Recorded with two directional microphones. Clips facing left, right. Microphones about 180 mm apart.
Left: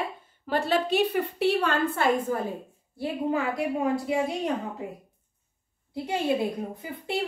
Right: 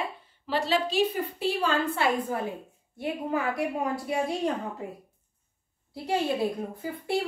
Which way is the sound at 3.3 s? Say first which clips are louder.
Left 1 dB; 25° left (ahead or behind).